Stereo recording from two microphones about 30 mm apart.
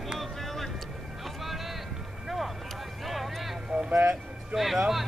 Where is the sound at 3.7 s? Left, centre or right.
Right.